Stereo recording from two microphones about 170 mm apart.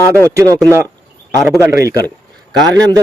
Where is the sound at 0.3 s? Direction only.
20° right (ahead or behind).